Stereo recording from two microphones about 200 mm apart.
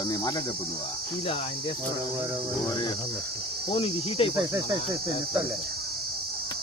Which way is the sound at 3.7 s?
25° left (ahead or behind).